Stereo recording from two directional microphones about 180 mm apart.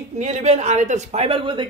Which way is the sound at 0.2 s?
35° right (ahead or behind).